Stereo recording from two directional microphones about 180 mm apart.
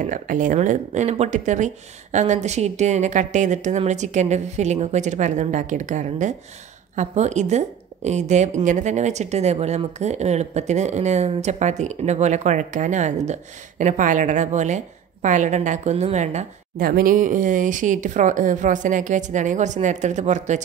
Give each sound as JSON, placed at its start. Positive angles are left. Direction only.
{"t": 0.0, "sound": "a woman's voice", "side_deg": -45}
{"t": 16.8, "sound": "speech", "side_deg": -50}